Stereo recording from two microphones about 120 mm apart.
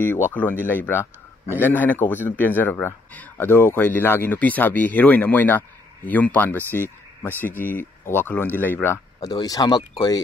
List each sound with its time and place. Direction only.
0.3 s speech: 15° left (ahead or behind)
9.2 s speech: 35° left (ahead or behind)